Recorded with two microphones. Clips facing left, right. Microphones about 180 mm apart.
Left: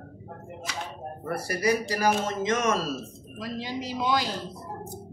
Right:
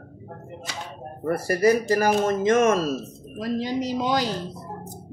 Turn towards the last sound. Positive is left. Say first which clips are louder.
# right 3 dB
turn(degrees=-40)  # may be behind; listen again after turning